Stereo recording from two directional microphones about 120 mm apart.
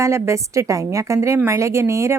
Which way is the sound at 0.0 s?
25° right (ahead or behind).